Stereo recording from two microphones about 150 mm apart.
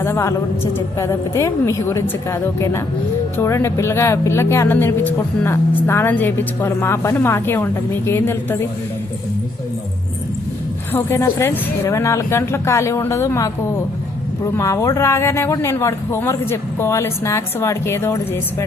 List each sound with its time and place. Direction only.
0.0 s a woman's voice: 20° left (ahead or behind)
10.9 s a woman's voice: 15° left (ahead or behind)